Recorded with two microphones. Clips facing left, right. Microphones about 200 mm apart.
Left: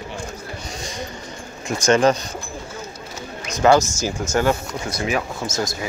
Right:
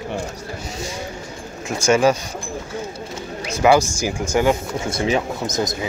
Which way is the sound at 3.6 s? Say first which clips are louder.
Even; 15° right (ahead or behind).